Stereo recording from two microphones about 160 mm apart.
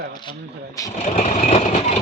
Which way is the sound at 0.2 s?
25° left (ahead or behind).